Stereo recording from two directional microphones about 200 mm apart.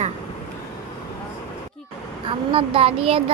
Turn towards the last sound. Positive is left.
turn(degrees=-30)  # may be behind; listen again after turning